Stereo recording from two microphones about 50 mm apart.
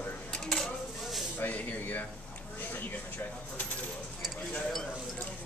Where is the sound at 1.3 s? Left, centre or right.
Left.